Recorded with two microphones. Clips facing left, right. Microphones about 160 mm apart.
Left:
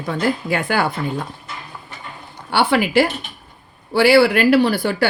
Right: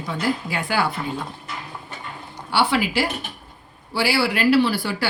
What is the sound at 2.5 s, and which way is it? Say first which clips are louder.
Speech: left 5 dB; 55° left (ahead or behind).